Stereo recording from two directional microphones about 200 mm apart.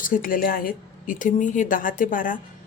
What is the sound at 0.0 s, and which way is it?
Speech, 45° left (ahead or behind).